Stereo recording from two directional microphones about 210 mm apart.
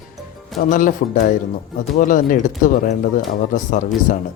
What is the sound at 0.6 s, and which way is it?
Speech, 40° left (ahead or behind).